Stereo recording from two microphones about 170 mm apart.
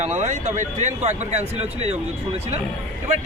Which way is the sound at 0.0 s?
45° right (ahead or behind).